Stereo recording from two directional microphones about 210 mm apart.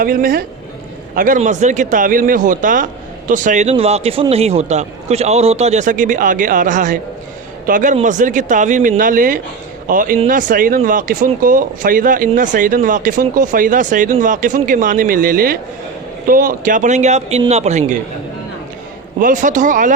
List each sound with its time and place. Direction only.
0.0 s a woman's voice: 45° right (ahead or behind)
19.2 s a man's voice: 35° right (ahead or behind)